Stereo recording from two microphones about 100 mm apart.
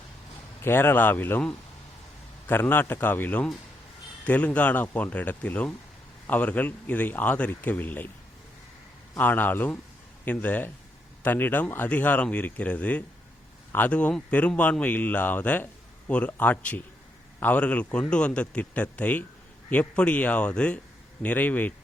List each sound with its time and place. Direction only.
0.6 s speech: 25° left (ahead or behind)
9.1 s speech: 20° left (ahead or behind)